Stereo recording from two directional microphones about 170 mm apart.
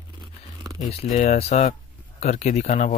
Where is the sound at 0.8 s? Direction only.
40° left (ahead or behind).